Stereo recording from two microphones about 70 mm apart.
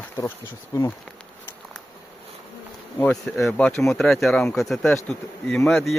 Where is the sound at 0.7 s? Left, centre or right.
Left.